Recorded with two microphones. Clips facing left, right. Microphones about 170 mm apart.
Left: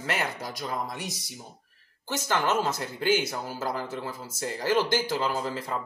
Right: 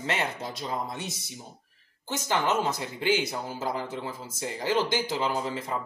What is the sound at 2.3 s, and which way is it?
Speech, 15° right (ahead or behind).